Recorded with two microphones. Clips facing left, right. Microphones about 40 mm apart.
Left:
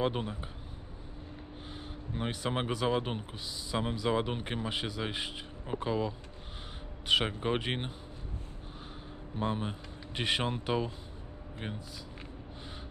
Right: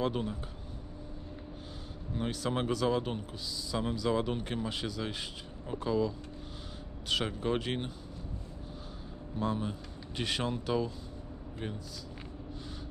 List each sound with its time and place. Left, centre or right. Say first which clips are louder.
0.0 s speech: even; left
2.1 s speech: right 1 dB; left
9.4 s speech: even; left